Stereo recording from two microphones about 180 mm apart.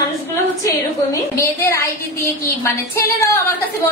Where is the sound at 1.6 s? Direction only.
15° left (ahead or behind).